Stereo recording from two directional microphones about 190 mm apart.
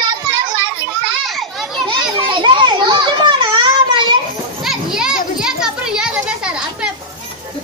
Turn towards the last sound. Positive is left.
turn(degrees=-5)  # may be behind; listen again after turning